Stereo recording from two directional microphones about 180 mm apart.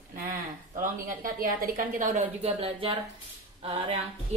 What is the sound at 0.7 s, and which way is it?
A woman's voice, 50° right (ahead or behind).